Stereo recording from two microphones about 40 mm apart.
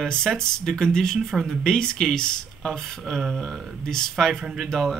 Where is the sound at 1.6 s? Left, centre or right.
Centre.